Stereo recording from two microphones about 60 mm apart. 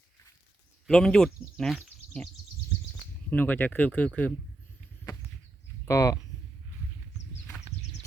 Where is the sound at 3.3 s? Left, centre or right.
Left.